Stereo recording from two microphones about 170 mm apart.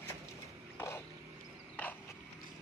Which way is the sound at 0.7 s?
15° left (ahead or behind).